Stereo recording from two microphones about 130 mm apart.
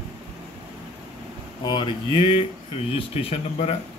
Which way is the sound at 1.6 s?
35° left (ahead or behind).